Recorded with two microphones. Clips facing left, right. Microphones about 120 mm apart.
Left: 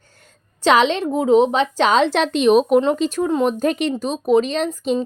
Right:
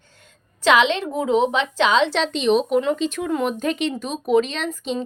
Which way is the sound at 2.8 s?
40° left (ahead or behind).